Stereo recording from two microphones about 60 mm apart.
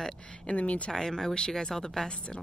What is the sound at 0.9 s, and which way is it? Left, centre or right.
Speech, centre.